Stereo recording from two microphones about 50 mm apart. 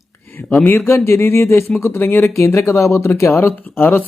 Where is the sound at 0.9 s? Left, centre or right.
Left.